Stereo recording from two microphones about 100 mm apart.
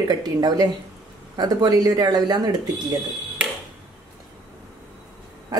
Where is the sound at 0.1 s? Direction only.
45° right (ahead or behind).